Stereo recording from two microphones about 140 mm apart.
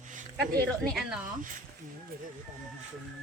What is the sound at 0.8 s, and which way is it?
Speech, centre (ahead or behind).